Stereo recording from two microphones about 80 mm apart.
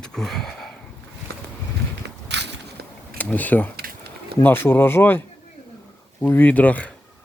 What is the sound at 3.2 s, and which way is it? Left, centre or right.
Speech, left.